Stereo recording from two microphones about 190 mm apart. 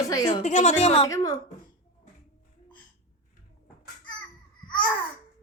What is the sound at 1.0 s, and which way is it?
Speech, 15° left (ahead or behind).